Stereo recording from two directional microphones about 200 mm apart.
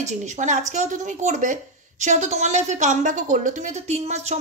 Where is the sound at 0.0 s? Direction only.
35° right (ahead or behind).